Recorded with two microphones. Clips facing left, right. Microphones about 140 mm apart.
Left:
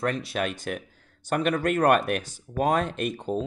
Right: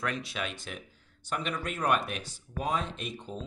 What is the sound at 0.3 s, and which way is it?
Speech, 50° left (ahead or behind).